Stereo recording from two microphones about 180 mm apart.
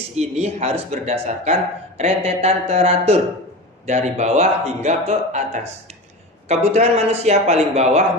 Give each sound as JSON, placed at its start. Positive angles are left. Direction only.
{"t": 0.2, "sound": "speech", "side_deg": -35}
{"t": 6.7, "sound": "speech", "side_deg": -35}